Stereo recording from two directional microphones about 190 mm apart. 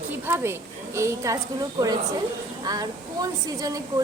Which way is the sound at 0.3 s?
15° right (ahead or behind).